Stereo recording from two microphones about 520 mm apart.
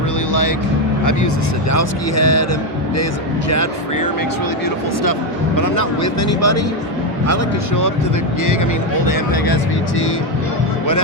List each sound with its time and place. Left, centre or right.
1.7 s speech: left
3.5 s speech: left
5.5 s speech: left
9.0 s speech: left